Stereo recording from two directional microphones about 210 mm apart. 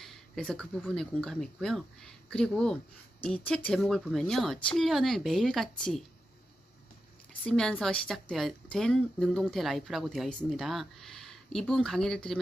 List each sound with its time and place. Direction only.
0.0 s speech: centre (ahead or behind)
7.4 s speech: 5° left (ahead or behind)